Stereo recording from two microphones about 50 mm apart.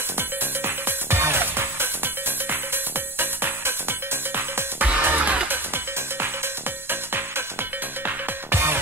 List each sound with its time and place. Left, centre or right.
0.7 s music: right
3.2 s music: right
5.0 s music: right
6.9 s music: right
8.5 s music: right